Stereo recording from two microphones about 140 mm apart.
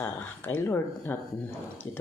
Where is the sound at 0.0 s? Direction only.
15° left (ahead or behind).